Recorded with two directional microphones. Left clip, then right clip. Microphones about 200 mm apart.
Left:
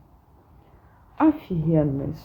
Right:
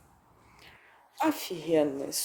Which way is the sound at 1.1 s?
15° right (ahead or behind).